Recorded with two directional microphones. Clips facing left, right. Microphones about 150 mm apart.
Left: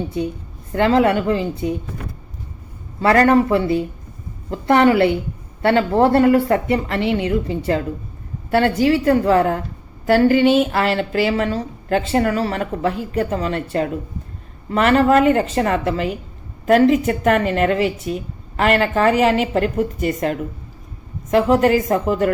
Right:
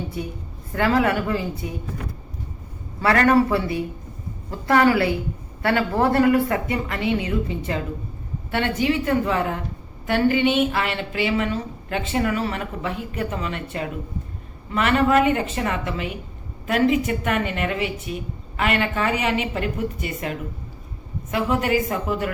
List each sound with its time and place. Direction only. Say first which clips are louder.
0.7 s a woman's voice: left 5 dB; 25° left (ahead or behind)
3.0 s a woman's voice: left 4 dB; 30° left (ahead or behind)